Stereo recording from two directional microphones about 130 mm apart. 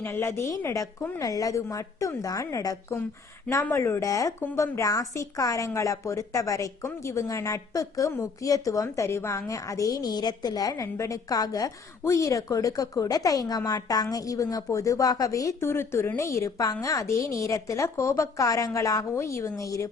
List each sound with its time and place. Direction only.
0.0 s a woman's voice: 20° left (ahead or behind)